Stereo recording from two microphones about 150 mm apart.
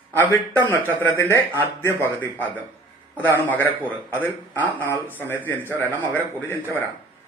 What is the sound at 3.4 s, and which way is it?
Speech, 15° left (ahead or behind).